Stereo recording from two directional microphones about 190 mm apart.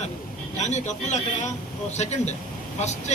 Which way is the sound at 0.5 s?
35° left (ahead or behind).